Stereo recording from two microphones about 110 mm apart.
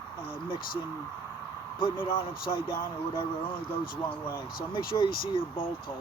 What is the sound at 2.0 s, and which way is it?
Speech, 50° left (ahead or behind).